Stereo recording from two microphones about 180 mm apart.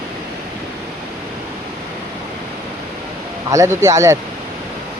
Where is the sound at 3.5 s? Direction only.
15° right (ahead or behind).